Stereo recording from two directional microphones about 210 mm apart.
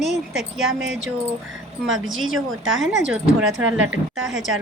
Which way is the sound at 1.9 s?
65° right (ahead or behind).